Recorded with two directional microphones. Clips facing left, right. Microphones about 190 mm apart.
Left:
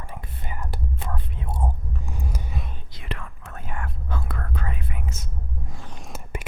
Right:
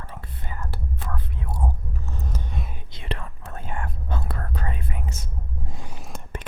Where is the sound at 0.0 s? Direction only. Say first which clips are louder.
Left 1 dB; 15° left (ahead or behind).